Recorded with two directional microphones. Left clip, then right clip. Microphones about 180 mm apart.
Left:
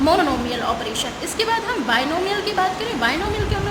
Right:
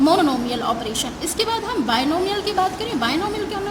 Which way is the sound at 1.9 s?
55° right (ahead or behind).